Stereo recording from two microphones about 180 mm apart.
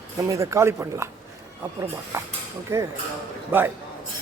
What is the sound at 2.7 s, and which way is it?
Speech, 15° right (ahead or behind).